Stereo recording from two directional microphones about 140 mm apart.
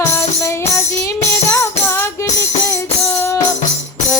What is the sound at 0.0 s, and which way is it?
Music, 20° left (ahead or behind).